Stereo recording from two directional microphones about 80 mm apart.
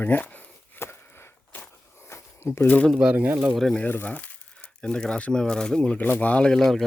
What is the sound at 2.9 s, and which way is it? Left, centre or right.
Speech, centre.